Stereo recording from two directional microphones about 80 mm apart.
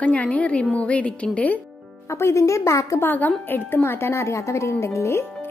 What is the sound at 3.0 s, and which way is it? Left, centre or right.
A woman's voice, left.